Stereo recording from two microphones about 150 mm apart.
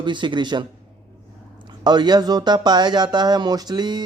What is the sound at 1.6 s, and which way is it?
Speech, 30° right (ahead or behind).